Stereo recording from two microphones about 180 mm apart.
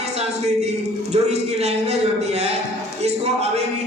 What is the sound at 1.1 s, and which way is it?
Speech, 35° right (ahead or behind).